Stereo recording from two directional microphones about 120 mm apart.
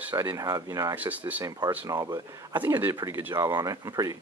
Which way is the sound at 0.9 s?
15° right (ahead or behind).